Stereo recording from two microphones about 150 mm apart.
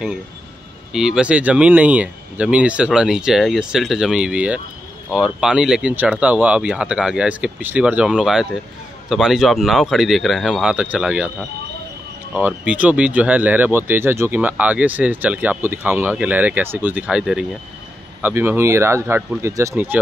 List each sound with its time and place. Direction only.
0.9 s speech: 5° right (ahead or behind)
12.4 s speech: 10° right (ahead or behind)